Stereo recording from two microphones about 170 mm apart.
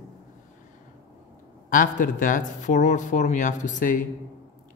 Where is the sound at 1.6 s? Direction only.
50° left (ahead or behind).